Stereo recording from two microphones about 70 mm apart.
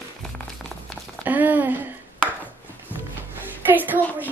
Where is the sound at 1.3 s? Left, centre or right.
Right.